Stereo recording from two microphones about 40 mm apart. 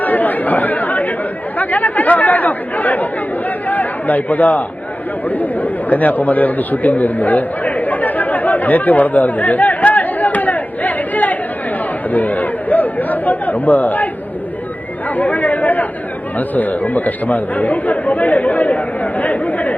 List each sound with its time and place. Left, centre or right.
0.0 s speech: left
5.3 s chatter: left
12.1 s speech: left
15.1 s chatter: left
16.4 s speech: left